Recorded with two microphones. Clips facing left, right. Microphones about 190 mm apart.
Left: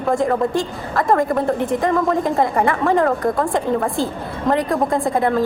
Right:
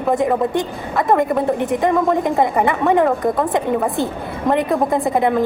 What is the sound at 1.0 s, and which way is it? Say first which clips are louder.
Speech: right 1 dB; 20° right (ahead or behind).